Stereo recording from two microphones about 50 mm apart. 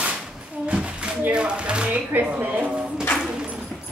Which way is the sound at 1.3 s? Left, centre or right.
Right.